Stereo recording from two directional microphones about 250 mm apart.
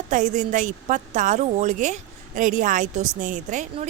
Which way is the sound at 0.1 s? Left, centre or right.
Right.